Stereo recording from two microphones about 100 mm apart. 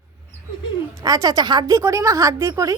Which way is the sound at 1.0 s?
40° right (ahead or behind).